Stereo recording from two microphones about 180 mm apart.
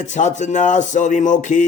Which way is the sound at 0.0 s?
40° left (ahead or behind).